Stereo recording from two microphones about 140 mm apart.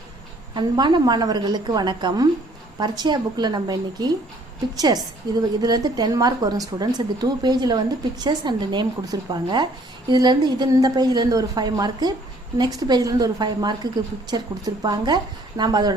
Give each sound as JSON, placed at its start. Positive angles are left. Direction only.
{"t": 0.5, "sound": "a woman's voice", "side_deg": -35}